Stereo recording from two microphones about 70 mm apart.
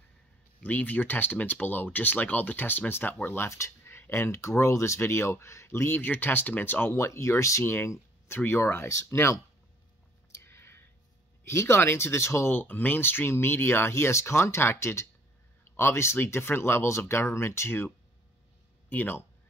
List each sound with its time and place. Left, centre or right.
0.6 s speech: left
7.0 s speech: left
10.3 s a sound: left
11.4 s speech: left
12.5 s speech: left